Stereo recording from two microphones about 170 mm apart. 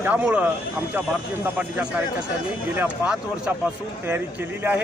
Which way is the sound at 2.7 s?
5° right (ahead or behind).